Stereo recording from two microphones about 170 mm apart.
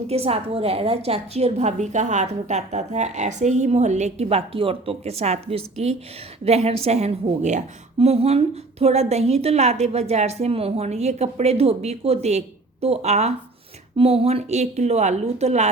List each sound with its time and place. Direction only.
0.1 s a woman's voice: 35° right (ahead or behind)